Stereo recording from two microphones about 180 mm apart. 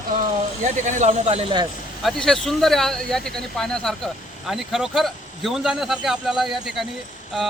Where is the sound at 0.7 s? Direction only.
45° right (ahead or behind).